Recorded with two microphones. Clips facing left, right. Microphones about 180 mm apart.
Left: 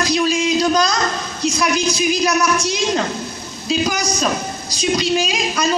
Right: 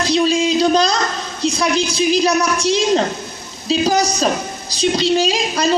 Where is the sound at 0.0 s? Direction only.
30° right (ahead or behind).